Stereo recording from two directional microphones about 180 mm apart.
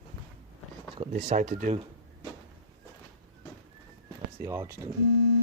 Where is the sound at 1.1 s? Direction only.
40° right (ahead or behind).